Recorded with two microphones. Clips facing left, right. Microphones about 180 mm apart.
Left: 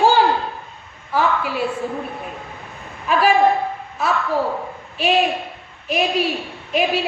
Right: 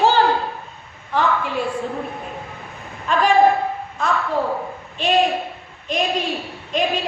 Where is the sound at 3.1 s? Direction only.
5° left (ahead or behind).